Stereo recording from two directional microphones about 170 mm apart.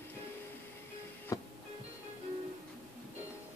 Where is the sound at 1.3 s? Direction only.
20° left (ahead or behind).